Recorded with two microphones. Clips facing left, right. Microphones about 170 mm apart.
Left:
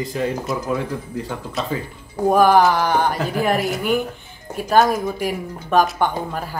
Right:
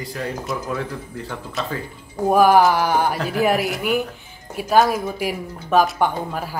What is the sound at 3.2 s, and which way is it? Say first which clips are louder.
A woman's voice: right 1 dB; 5° right (ahead or behind).